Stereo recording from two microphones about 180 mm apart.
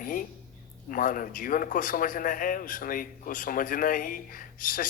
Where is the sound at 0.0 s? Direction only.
50° left (ahead or behind).